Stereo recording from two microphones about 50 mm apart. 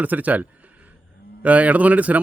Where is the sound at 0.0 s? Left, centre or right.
Right.